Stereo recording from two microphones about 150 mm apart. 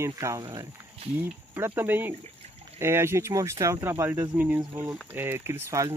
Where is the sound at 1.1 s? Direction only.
15° right (ahead or behind).